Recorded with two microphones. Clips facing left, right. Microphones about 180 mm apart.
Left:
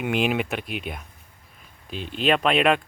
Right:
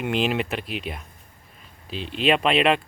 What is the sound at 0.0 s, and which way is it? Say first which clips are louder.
Speech: even; 5° left (ahead or behind).